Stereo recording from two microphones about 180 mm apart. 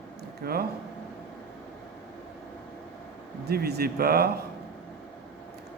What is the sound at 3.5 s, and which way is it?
Speech, 60° right (ahead or behind).